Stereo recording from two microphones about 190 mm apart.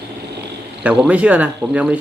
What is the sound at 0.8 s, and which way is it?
Speech, 5° right (ahead or behind).